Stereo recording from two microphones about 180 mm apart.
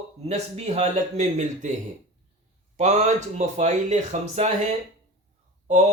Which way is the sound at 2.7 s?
40° right (ahead or behind).